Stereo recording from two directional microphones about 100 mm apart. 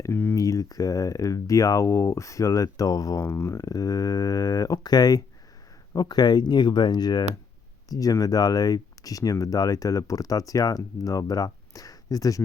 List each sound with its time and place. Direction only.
0.0 s a sound: 25° left (ahead or behind)
0.3 s speech: 35° left (ahead or behind)
3.2 s speech: 25° left (ahead or behind)